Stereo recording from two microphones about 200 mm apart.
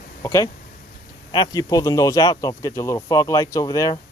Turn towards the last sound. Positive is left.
turn(degrees=15)  # may be behind; listen again after turning